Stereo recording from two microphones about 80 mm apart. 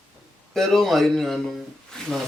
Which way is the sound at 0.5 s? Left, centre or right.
Centre.